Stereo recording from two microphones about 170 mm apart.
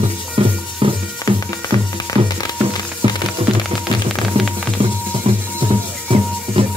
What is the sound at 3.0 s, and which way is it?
Music, 30° right (ahead or behind).